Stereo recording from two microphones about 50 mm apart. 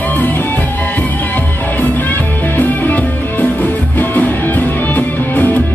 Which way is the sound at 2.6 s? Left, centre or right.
Left.